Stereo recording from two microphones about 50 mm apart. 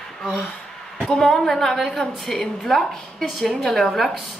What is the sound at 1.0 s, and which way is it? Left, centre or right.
A woman's voice, centre.